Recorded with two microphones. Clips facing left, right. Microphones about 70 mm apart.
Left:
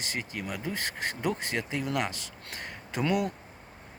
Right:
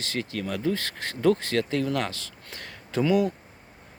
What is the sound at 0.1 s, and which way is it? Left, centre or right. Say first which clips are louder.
Speech: right 6 dB; centre.